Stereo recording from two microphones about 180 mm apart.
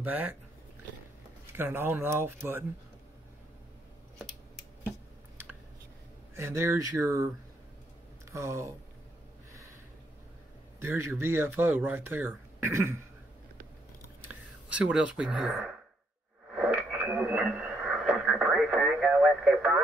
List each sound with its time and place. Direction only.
0.0 s speech: 10° right (ahead or behind)
1.6 s speech: 10° right (ahead or behind)
6.3 s speech: 15° right (ahead or behind)
8.3 s speech: 15° right (ahead or behind)
10.8 s speech: 15° right (ahead or behind)
14.2 s speech: 5° right (ahead or behind)
16.5 s radio: 10° right (ahead or behind)